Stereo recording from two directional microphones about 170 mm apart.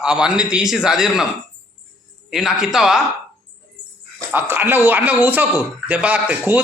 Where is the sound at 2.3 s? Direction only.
Centre (ahead or behind).